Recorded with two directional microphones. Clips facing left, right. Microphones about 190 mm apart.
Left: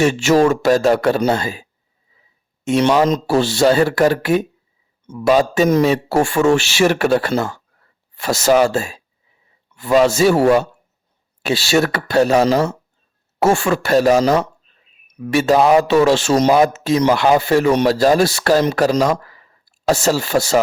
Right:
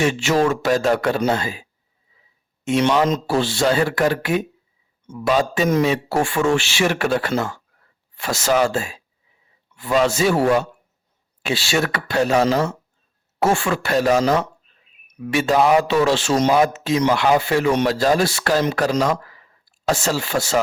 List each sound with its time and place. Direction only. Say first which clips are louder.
0.0 s a man's voice: left 5 dB; 45° left (ahead or behind)
2.6 s a man's voice: left 3 dB; 40° left (ahead or behind)